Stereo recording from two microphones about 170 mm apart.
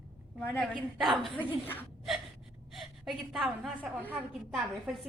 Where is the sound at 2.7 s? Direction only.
Centre (ahead or behind).